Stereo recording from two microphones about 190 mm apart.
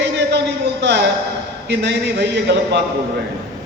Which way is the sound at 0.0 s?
65° right (ahead or behind).